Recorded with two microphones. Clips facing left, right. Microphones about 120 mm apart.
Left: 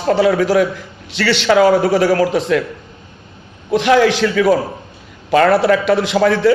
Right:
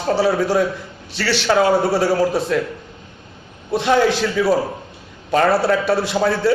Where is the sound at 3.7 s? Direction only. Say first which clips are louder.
Left 4 dB; 90° left.